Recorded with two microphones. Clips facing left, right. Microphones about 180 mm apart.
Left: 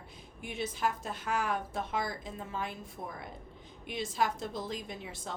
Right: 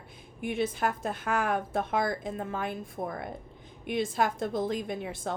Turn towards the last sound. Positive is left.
turn(degrees=-55)  # may be behind; listen again after turning